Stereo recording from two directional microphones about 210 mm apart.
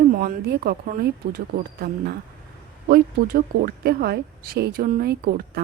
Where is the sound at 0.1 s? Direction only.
45° right (ahead or behind).